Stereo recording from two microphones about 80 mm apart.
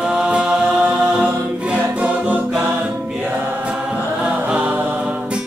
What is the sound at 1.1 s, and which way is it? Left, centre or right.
Choir, centre.